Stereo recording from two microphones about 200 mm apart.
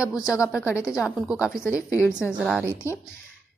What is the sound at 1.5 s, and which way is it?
Speech, 15° left (ahead or behind).